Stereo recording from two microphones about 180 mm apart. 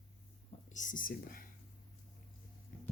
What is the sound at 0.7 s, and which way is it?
Speech, 45° left (ahead or behind).